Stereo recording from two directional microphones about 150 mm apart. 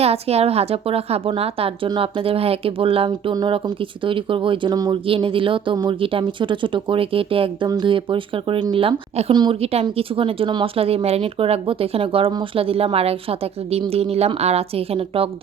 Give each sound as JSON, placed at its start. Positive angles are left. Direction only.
{"t": 0.0, "sound": "a woman's voice", "side_deg": -45}